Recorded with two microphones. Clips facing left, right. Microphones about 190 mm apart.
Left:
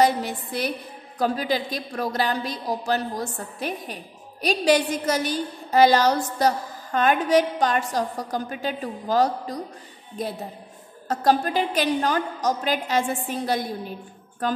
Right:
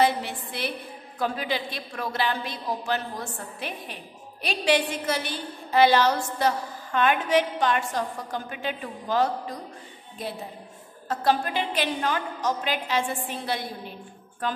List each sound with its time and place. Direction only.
0.0 s a woman's voice: 40° left (ahead or behind)